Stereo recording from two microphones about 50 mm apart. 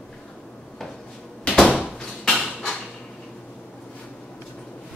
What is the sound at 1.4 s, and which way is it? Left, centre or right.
Door, centre.